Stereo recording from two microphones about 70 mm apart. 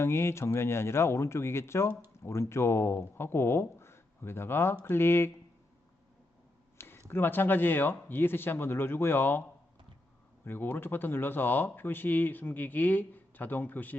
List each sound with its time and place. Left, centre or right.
0.0 s speech: left
6.7 s a sound: left
7.1 s speech: left
10.4 s speech: left